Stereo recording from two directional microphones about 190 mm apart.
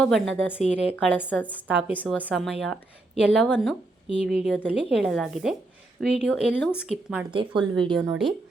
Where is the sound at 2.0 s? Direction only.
10° left (ahead or behind).